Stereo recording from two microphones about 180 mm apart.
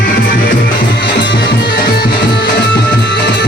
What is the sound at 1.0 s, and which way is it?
Music, 70° left (ahead or behind).